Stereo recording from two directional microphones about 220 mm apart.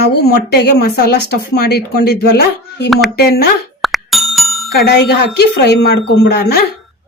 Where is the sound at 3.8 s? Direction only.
Centre (ahead or behind).